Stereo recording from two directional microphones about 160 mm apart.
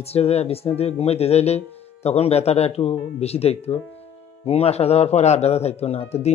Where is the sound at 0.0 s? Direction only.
40° left (ahead or behind).